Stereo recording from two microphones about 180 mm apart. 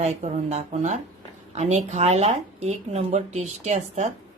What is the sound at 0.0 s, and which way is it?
Speech, 40° right (ahead or behind).